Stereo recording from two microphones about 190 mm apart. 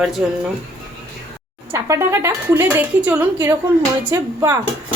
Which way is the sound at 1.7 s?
15° right (ahead or behind).